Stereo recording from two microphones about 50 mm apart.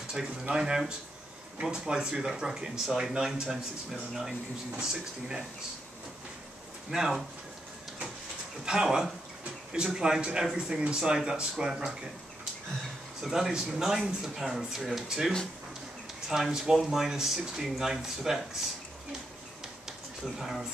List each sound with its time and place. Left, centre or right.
0.1 s speech: centre
6.9 s speech: centre
8.6 s speech: centre
13.2 s speech: centre
20.3 s speech: centre